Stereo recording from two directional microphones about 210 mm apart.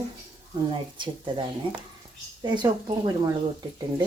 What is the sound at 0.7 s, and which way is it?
Speech, 25° right (ahead or behind).